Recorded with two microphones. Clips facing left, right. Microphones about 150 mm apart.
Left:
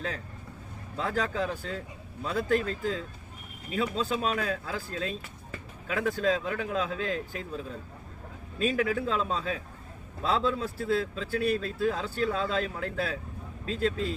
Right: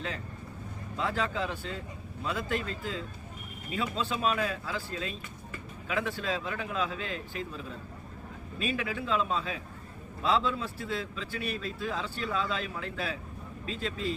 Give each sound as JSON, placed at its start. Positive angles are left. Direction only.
{"t": 0.9, "sound": "a man's voice", "side_deg": 45}
{"t": 8.7, "sound": "a man's voice", "side_deg": 45}